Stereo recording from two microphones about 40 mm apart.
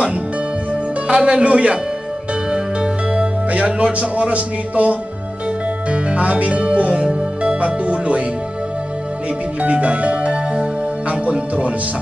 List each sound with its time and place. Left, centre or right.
1.0 s speech: right
2.5 s music: right
5.9 s speech: right
9.6 s speech: right